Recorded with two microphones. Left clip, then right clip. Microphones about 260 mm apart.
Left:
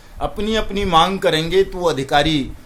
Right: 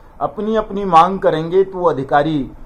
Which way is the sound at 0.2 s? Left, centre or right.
Left.